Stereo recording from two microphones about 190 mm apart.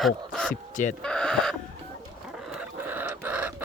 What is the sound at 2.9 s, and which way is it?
Chicken, 10° right (ahead or behind).